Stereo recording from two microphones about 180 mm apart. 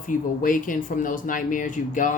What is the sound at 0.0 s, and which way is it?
Speech, 45° left (ahead or behind).